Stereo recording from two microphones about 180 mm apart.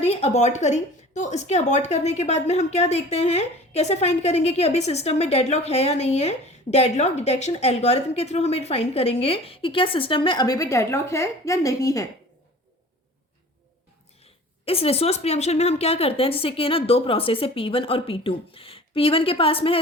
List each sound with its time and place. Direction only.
0.0 s a woman's voice: 35° left (ahead or behind); by 12.0 s 20° left (ahead or behind)
14.6 s a woman's voice: 35° left (ahead or behind)